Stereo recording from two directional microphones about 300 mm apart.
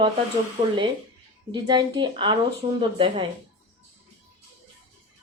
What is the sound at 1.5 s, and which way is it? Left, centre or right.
Speech, centre.